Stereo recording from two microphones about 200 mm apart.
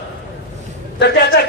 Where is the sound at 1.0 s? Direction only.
55° left (ahead or behind).